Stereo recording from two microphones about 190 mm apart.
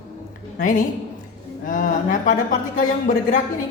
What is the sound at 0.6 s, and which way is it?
A man's voice, 45° left (ahead or behind).